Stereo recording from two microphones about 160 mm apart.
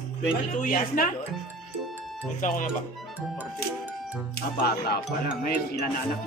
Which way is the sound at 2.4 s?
55° left (ahead or behind).